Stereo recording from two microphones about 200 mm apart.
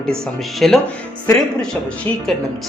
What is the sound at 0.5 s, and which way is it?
Speech, centre (ahead or behind).